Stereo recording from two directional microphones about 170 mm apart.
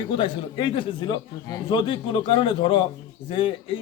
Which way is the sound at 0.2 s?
25° left (ahead or behind).